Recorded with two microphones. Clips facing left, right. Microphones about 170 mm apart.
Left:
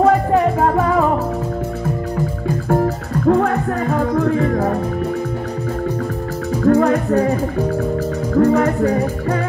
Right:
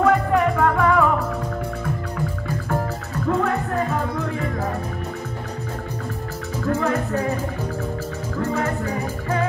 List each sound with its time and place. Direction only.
0.0 s music: 35° left (ahead or behind)
3.3 s music: 55° left (ahead or behind)
6.6 s music: 40° left (ahead or behind)
8.4 s music: 40° left (ahead or behind)